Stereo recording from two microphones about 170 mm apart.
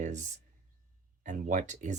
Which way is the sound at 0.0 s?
45° right (ahead or behind).